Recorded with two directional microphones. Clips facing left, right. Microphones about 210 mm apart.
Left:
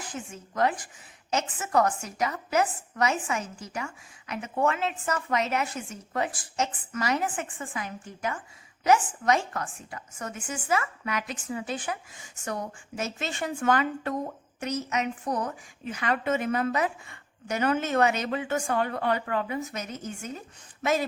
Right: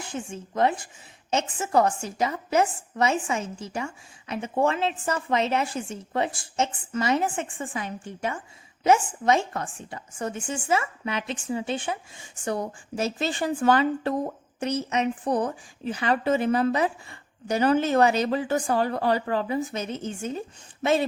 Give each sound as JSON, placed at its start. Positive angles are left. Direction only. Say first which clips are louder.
{"t": 0.0, "sound": "a woman's voice", "louder": "right 4 dB", "side_deg": -25}